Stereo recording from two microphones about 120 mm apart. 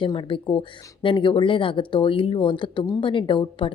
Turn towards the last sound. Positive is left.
turn(degrees=45)  # may be behind; listen again after turning